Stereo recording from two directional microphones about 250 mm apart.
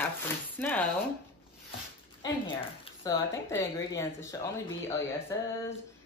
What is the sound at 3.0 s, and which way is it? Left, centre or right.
Speech, centre.